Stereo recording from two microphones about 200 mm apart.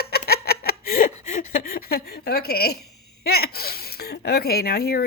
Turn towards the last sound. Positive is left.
turn(degrees=50)  # may be behind; listen again after turning